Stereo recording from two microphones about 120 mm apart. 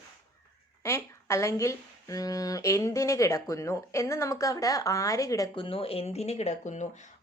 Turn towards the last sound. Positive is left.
turn(degrees=70)  # may be behind; listen again after turning